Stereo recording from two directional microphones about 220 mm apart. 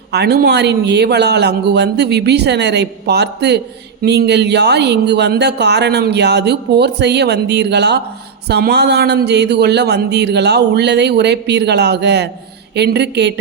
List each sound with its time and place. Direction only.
0.1 s speech: 50° right (ahead or behind)